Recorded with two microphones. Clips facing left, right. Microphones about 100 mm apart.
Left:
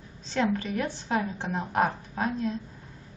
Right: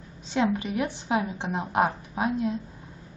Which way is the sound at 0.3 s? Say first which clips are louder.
Right 2 dB; 10° right (ahead or behind).